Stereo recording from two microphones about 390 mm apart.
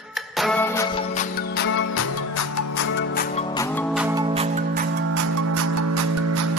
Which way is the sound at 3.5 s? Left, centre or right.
Centre.